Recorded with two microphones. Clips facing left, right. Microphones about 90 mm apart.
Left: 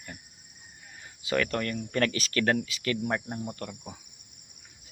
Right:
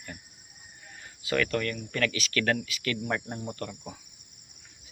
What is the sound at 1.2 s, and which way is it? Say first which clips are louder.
Speech: even; 25° left (ahead or behind).